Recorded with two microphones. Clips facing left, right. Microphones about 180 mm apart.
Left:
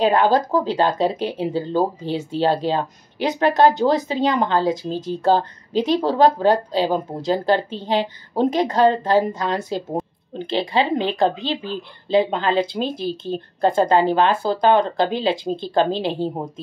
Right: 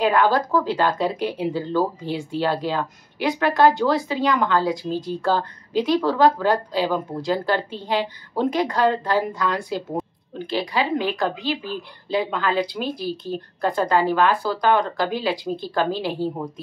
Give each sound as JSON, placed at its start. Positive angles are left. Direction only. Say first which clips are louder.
{"t": 0.0, "sound": "speech", "louder": "left 2 dB", "side_deg": 20}
{"t": 1.5, "sound": "speech", "louder": "left 3 dB", "side_deg": 35}
{"t": 2.1, "sound": "speech", "louder": "left 4 dB", "side_deg": 25}